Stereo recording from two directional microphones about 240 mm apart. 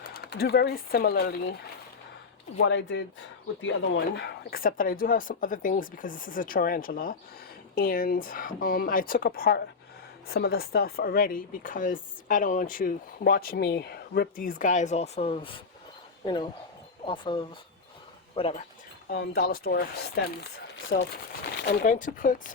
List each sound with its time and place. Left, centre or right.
0.0 s speech: left
2.6 s speech: left
19.1 s speech: left
21.8 s speech: left